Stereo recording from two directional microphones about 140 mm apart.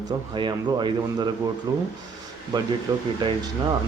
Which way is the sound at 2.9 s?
25° right (ahead or behind).